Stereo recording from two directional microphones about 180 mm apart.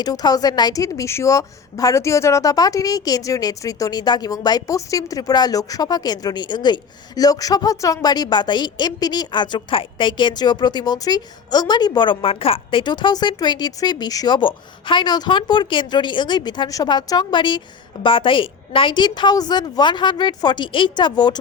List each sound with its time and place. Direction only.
0.0 s a woman's voice: 20° left (ahead or behind)